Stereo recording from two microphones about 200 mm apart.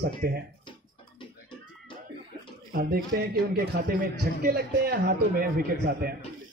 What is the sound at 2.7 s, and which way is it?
A man's voice, 45° right (ahead or behind).